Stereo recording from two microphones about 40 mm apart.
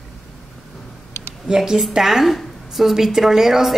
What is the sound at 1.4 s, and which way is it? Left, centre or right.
A woman's voice, centre.